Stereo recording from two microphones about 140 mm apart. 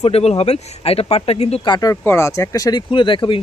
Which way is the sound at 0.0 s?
45° left (ahead or behind).